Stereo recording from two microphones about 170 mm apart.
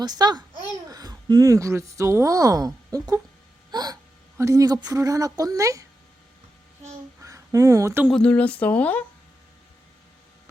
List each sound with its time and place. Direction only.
0.0 s a woman's voice: 25° right (ahead or behind)
3.7 s gasp: 25° right (ahead or behind)
4.4 s a woman's voice: 20° right (ahead or behind)
6.8 s a child's voice: 15° right (ahead or behind)
8.1 s speech: 5° left (ahead or behind)